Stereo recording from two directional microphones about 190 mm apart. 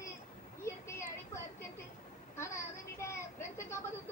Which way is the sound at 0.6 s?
15° left (ahead or behind).